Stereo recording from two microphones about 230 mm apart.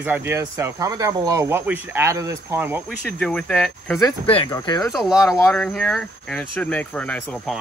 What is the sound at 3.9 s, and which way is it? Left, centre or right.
Speech, centre.